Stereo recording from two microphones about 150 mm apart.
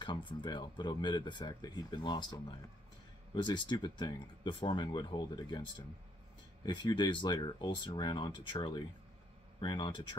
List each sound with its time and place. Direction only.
0.0 s speech: 30° left (ahead or behind)
3.3 s speech: 30° left (ahead or behind)